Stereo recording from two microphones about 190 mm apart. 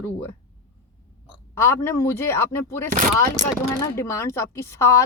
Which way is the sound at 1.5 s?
15° left (ahead or behind).